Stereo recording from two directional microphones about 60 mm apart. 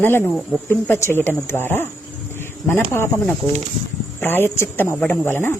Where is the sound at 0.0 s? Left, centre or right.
Left.